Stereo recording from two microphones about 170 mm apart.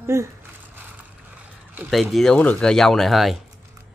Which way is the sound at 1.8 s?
Centre (ahead or behind).